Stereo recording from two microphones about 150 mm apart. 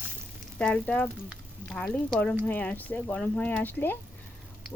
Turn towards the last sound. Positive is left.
turn(degrees=15)  # may be behind; listen again after turning